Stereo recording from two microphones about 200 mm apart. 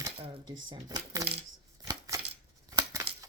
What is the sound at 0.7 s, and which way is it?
Speech, 20° right (ahead or behind).